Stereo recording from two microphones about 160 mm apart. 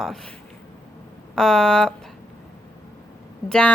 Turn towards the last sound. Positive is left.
turn(degrees=5)  # may be behind; listen again after turning